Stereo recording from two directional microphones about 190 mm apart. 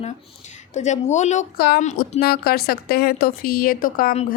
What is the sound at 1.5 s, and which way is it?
A woman's voice, 55° left (ahead or behind).